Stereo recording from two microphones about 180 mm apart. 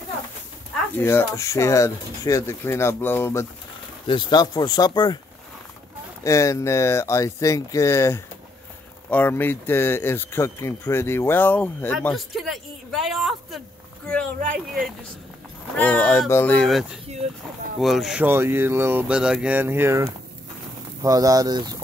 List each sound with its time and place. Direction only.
0.9 s speech: 15° left (ahead or behind)
4.1 s speech: 25° left (ahead or behind)
6.2 s speech: 15° left (ahead or behind)
12.2 s speech: centre (ahead or behind)
15.7 s speech: 10° left (ahead or behind); by 21.7 s 20° right (ahead or behind)